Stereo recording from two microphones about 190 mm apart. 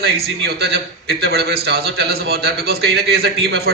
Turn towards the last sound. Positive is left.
turn(degrees=-55)  # may be behind; listen again after turning